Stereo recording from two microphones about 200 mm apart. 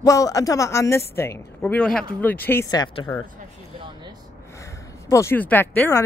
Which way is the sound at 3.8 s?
20° right (ahead or behind).